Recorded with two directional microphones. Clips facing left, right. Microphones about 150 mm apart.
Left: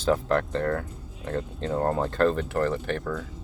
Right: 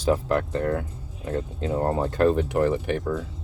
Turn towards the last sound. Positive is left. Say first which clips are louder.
# right 3 dB
turn(degrees=-15)  # may be behind; listen again after turning